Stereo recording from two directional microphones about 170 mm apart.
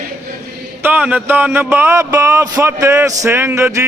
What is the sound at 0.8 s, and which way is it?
Speech, 10° right (ahead or behind).